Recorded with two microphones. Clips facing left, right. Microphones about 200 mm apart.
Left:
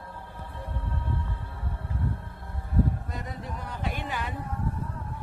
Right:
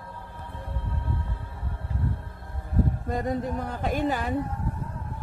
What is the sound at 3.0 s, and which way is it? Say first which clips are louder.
Speech: right 10 dB; 45° right (ahead or behind).